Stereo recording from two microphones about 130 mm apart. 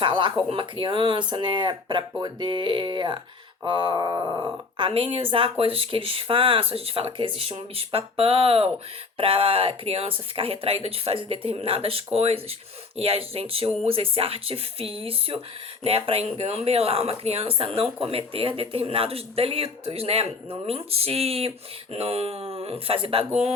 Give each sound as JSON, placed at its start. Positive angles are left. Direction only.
{"t": 0.0, "sound": "speech", "side_deg": -40}